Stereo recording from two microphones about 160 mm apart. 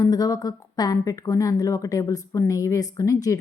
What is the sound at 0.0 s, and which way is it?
A woman's voice, 25° left (ahead or behind).